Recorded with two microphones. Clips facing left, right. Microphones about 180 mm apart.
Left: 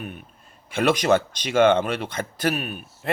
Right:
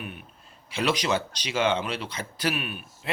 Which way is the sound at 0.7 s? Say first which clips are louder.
Left 6 dB; 50° left (ahead or behind).